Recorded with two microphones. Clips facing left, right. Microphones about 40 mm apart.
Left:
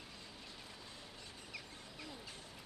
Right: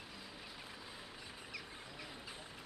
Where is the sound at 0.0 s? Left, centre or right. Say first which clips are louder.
Right 2 dB; centre.